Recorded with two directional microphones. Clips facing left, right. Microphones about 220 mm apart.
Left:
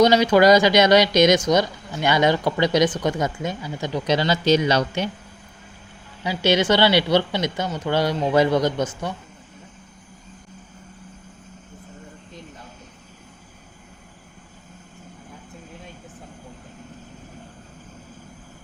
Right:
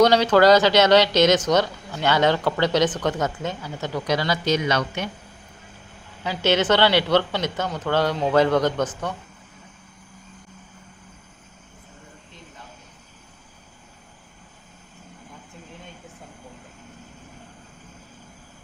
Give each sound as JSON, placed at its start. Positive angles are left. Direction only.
{"t": 0.0, "sound": "speech", "side_deg": 10}
{"t": 6.2, "sound": "speech", "side_deg": 10}